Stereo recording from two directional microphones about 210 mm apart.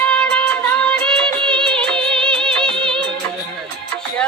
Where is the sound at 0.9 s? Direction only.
5° left (ahead or behind).